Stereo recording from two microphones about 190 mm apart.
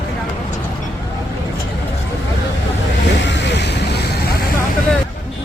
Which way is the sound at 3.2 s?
65° left (ahead or behind).